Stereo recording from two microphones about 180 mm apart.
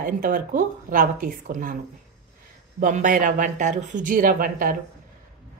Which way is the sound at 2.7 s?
45° right (ahead or behind).